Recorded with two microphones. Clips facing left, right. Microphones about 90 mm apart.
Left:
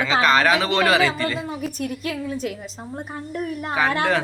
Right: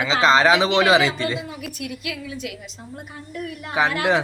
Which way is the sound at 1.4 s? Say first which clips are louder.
Left 4 dB; 40° left (ahead or behind).